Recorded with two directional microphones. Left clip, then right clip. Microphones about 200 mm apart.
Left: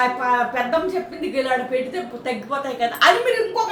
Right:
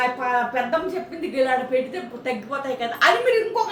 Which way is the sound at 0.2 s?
Centre (ahead or behind).